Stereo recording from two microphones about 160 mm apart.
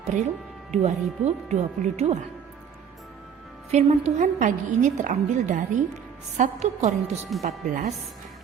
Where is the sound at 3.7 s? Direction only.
45° right (ahead or behind).